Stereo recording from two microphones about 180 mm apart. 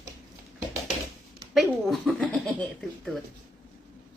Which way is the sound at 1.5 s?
Centre (ahead or behind).